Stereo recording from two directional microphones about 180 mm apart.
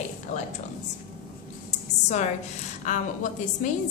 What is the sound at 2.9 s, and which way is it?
Speech, 45° left (ahead or behind).